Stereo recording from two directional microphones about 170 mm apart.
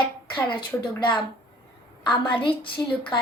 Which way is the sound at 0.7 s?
15° left (ahead or behind).